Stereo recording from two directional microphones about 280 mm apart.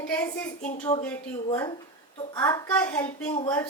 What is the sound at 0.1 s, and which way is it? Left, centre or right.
A woman's voice, centre.